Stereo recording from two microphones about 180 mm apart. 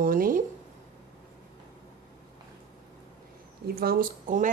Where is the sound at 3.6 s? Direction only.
60° right (ahead or behind).